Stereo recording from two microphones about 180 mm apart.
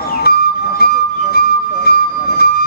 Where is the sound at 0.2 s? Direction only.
60° left (ahead or behind).